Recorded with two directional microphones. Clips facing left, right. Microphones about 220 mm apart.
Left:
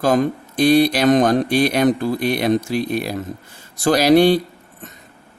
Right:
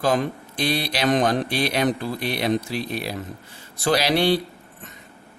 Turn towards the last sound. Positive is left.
turn(degrees=45)  # may be behind; listen again after turning